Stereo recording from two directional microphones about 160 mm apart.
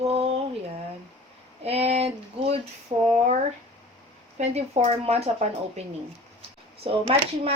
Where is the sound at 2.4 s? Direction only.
40° right (ahead or behind).